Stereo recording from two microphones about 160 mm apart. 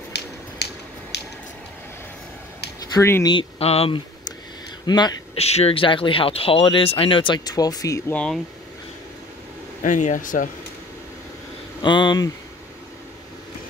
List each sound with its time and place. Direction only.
0.1 s a sound: 90° left
2.9 s speech: 15° left (ahead or behind)
3.3 s speech: 35° left (ahead or behind)
4.8 s speech: 25° left (ahead or behind)
5.4 s speech: 40° left (ahead or behind); by 8.0 s 20° left (ahead or behind)
8.1 s speech: 5° left (ahead or behind)
9.8 s speech: 50° left (ahead or behind)
11.8 s speech: 30° left (ahead or behind)